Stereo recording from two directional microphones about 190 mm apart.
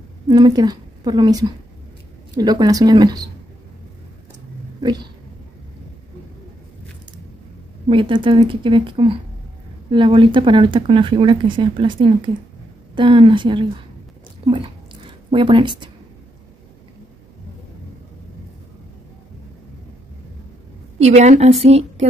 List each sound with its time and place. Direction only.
0.3 s speech: 20° right (ahead or behind)
4.8 s speech: 20° right (ahead or behind)
7.9 s speech: 25° right (ahead or behind)
14.4 s a sound: 25° right (ahead or behind)
21.0 s a woman's voice: 35° right (ahead or behind)